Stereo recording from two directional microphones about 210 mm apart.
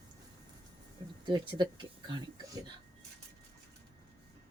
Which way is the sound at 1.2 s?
25° right (ahead or behind).